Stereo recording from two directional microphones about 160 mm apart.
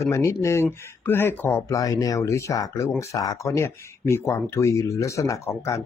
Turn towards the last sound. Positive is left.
turn(degrees=15)  # may be behind; listen again after turning